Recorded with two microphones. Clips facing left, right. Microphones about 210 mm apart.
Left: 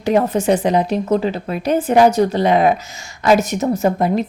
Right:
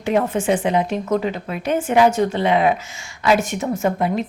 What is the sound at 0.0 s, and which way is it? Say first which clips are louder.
A woman's voice: left 3 dB; 40° left (ahead or behind).